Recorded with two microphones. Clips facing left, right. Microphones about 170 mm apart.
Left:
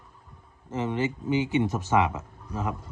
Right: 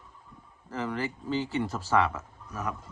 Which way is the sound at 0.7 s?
20° left (ahead or behind).